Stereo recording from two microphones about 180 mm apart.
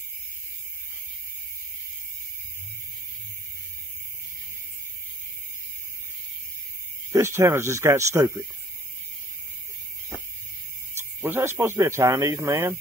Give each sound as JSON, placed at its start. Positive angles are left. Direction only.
{"t": 7.1, "sound": "speech", "side_deg": -15}
{"t": 11.1, "sound": "speech", "side_deg": -10}